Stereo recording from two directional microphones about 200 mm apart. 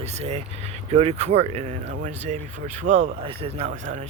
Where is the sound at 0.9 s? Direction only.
30° right (ahead or behind).